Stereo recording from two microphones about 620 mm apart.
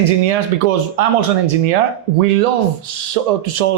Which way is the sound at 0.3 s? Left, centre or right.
Right.